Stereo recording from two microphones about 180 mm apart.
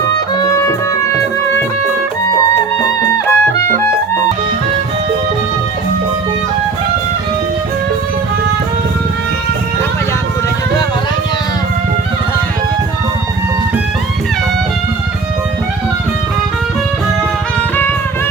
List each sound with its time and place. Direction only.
2.8 s music: 15° left (ahead or behind)